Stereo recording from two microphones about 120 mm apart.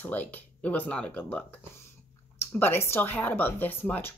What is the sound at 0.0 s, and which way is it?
Speech, 15° left (ahead or behind).